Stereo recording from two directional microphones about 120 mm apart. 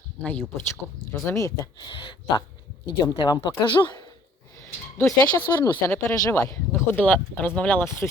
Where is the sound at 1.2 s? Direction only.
25° left (ahead or behind).